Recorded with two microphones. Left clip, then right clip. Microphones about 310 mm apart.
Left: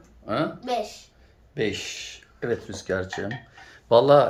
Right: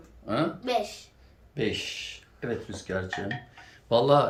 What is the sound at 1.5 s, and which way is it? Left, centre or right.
Speech, centre.